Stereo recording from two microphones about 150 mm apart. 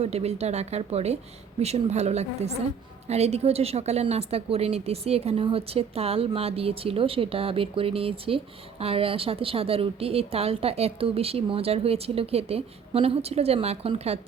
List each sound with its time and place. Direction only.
0.0 s a woman's voice: 45° right (ahead or behind)